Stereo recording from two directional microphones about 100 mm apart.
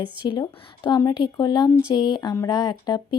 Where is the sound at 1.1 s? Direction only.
45° left (ahead or behind).